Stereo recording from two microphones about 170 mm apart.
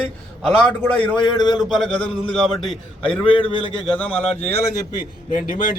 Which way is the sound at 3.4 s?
30° left (ahead or behind).